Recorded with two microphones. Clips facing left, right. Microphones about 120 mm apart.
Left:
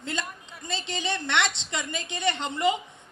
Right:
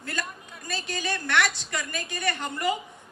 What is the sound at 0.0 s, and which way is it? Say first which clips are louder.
A woman's voice: left 1 dB; 20° left (ahead or behind).